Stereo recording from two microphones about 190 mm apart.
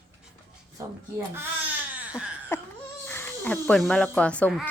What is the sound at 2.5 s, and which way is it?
Laughter, 15° left (ahead or behind).